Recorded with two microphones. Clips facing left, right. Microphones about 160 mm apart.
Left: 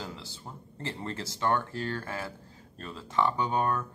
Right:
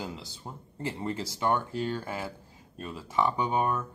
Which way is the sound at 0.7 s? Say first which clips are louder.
Right 4 dB; 10° right (ahead or behind).